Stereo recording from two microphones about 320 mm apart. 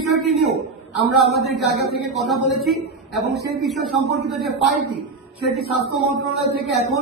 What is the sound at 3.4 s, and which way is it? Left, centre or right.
Speech, right.